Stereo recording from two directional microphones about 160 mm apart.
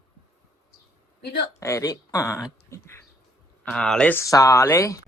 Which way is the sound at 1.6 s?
20° left (ahead or behind).